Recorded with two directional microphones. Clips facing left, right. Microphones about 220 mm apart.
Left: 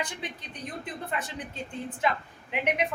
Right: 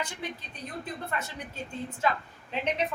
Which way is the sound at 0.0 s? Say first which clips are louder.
Even; 20° left (ahead or behind).